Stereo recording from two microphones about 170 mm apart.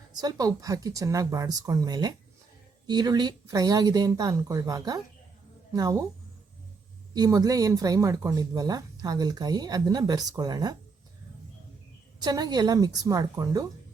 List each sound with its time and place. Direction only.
0.1 s speech: 25° right (ahead or behind)
7.1 s speech: 20° right (ahead or behind)
12.2 s speech: 25° right (ahead or behind)